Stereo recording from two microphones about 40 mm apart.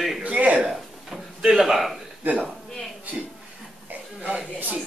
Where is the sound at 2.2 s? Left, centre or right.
Right.